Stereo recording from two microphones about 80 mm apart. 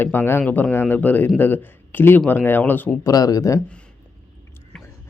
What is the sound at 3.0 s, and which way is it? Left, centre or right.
Speech, left.